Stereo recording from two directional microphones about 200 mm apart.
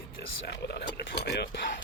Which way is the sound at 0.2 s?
55° left (ahead or behind).